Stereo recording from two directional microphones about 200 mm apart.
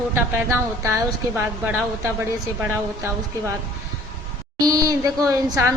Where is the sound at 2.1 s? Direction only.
10° right (ahead or behind).